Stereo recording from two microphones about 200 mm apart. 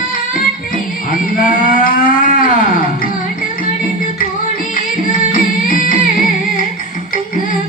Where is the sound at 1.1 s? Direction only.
45° left (ahead or behind).